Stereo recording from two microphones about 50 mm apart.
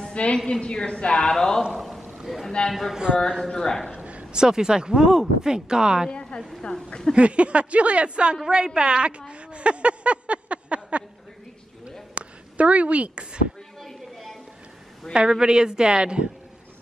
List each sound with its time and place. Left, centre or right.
0.1 s a woman's voice: left
2.2 s a sound: centre
2.7 s speech: centre
3.3 s a woman's voice: centre
3.9 s a sound: right
4.4 s a woman's voice: centre
6.0 s a woman's voice: centre
7.2 s speech: right
9.3 s a sound: right
12.2 s speech: right
13.7 s a sound: centre
15.1 s a woman's voice: centre